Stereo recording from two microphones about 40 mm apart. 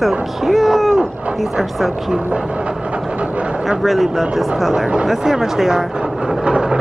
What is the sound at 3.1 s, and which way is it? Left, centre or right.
Vehicle, right.